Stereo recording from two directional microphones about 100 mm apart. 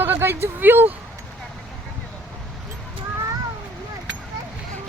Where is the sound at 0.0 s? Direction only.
20° right (ahead or behind).